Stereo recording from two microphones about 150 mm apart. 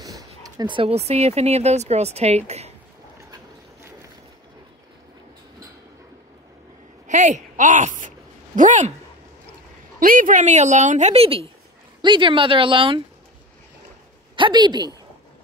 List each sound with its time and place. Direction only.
0.6 s a woman's voice: 35° right (ahead or behind)
7.1 s a sound: 55° right (ahead or behind)
8.5 s speech: 55° right (ahead or behind)
9.9 s a woman's voice: 65° right (ahead or behind); by 13.0 s 35° right (ahead or behind)
14.3 s speech: 30° right (ahead or behind)